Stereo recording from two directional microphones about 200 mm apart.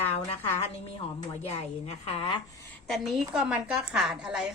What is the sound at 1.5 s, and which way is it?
Speech, 30° left (ahead or behind).